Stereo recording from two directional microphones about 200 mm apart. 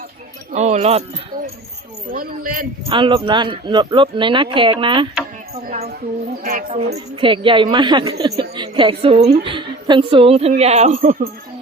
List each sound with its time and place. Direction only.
0.5 s speech: 35° right (ahead or behind)
2.0 s speech: 45° right (ahead or behind)
2.9 s a woman's voice: 25° right (ahead or behind)
5.6 s speech: 35° right (ahead or behind)
6.7 s a woman's voice: 25° right (ahead or behind)